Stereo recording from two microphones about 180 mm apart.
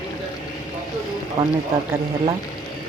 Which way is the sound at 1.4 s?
30° right (ahead or behind).